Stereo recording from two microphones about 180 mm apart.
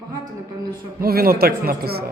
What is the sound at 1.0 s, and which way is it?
Speech, 55° right (ahead or behind).